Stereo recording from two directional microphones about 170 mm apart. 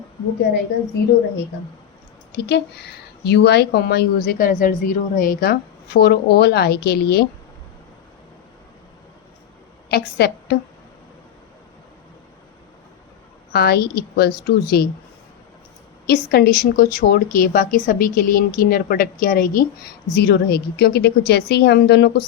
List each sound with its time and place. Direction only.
2.3 s speech: 85° left
9.9 s a woman's voice: 70° left (ahead or behind)
13.5 s speech: 70° left (ahead or behind)
16.0 s a woman's voice: 70° left (ahead or behind)
20.1 s speech: 75° left (ahead or behind)